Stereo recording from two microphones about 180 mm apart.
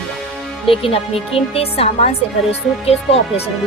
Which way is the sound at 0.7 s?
30° left (ahead or behind).